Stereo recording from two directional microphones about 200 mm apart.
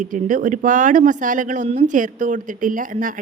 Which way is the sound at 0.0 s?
40° right (ahead or behind).